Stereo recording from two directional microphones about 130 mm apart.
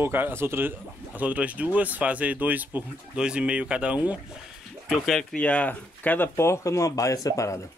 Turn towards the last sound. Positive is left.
turn(degrees=25)  # may be behind; listen again after turning